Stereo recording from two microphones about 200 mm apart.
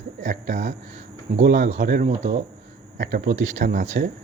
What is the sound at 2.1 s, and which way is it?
A man's voice, 35° right (ahead or behind).